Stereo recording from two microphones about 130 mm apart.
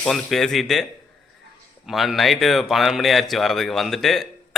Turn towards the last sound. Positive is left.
turn(degrees=0)  # may be behind; listen again after turning